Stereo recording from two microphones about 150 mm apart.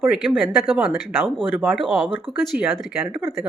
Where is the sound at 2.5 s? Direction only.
80° right.